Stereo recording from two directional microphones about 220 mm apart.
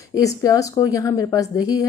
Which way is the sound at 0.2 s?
15° left (ahead or behind).